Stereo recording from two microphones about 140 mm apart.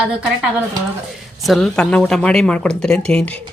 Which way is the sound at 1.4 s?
Centre (ahead or behind).